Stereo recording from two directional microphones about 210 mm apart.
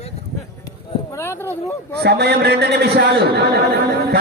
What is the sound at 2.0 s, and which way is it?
Speech, 50° right (ahead or behind).